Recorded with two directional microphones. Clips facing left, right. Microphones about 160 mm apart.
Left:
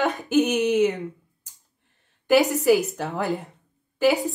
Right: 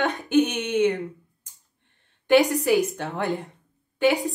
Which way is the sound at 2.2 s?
Centre (ahead or behind).